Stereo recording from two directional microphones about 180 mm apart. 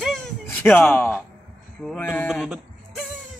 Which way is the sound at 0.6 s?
10° left (ahead or behind).